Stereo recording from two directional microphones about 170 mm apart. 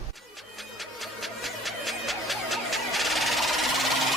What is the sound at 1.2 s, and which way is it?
Music, centre (ahead or behind).